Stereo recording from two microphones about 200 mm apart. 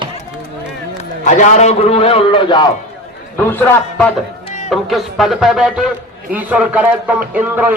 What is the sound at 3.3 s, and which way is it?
A man's voice, 10° left (ahead or behind).